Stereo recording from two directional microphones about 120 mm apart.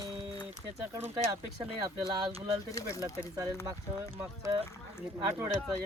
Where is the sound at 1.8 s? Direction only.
40° right (ahead or behind).